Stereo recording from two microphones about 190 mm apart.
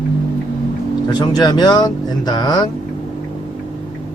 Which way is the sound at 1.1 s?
20° left (ahead or behind).